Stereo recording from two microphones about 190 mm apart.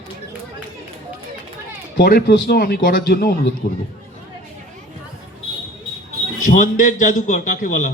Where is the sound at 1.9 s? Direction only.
55° left (ahead or behind).